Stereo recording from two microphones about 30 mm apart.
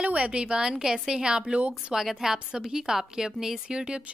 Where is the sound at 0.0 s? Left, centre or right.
Right.